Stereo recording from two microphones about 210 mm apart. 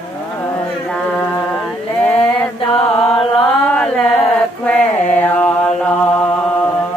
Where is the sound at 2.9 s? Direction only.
5° left (ahead or behind).